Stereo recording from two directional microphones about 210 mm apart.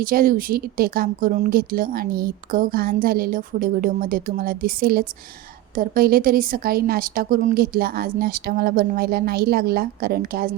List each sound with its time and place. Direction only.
0.0 s speech: 45° right (ahead or behind)